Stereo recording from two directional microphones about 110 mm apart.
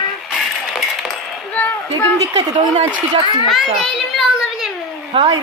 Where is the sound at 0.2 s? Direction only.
Centre (ahead or behind).